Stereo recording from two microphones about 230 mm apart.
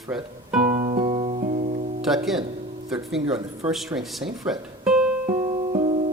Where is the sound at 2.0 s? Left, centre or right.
Centre.